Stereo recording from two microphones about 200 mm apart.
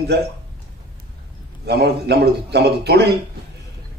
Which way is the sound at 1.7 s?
55° right (ahead or behind).